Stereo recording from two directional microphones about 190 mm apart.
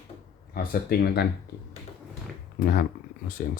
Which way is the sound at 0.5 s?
50° left (ahead or behind).